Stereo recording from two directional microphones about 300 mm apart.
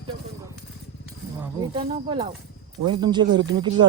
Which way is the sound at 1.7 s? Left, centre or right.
Centre.